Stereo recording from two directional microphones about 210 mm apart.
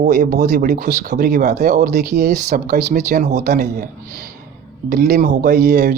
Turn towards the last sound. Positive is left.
turn(degrees=-50)  # may be behind; listen again after turning